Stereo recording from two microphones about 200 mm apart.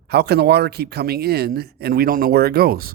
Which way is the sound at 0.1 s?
55° right (ahead or behind).